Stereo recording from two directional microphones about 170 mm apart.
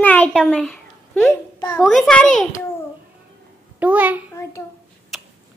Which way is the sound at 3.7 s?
10° right (ahead or behind).